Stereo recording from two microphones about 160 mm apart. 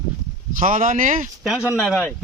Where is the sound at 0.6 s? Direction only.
55° right (ahead or behind).